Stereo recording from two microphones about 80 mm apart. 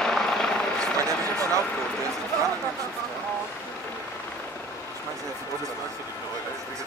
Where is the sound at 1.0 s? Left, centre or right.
Right.